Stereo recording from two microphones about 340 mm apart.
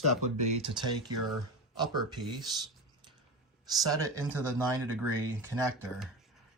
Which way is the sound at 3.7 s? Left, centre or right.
Centre.